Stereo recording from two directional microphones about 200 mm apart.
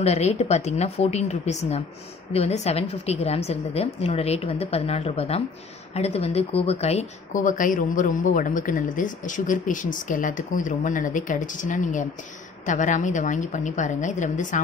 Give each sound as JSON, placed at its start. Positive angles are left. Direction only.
{"t": 0.0, "sound": "speech", "side_deg": 35}